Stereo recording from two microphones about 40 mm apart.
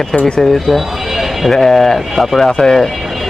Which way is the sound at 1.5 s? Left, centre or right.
Centre.